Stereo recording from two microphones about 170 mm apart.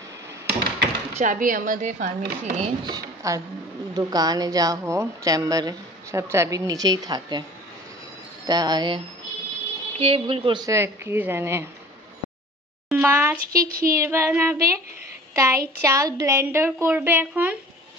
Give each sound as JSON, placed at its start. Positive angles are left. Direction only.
{"t": 0.5, "sound": "a sound", "side_deg": -80}
{"t": 1.1, "sound": "a woman's voice", "side_deg": -50}
{"t": 2.8, "sound": "speech", "side_deg": -20}
{"t": 8.5, "sound": "speech", "side_deg": -25}
{"t": 12.9, "sound": "speech", "side_deg": -10}
{"t": 13.5, "sound": "speech", "side_deg": -60}
{"t": 13.9, "sound": "a child's voice", "side_deg": -15}